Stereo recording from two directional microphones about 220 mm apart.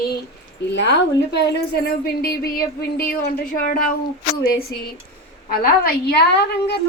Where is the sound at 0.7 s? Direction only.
55° left (ahead or behind).